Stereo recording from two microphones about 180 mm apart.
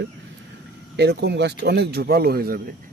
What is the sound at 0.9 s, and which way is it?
Speech, 65° right (ahead or behind).